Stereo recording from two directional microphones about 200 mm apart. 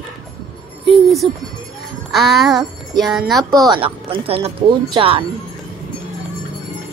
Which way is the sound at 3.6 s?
20° right (ahead or behind).